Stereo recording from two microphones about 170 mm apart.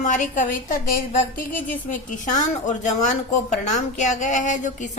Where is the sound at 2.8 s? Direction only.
45° left (ahead or behind).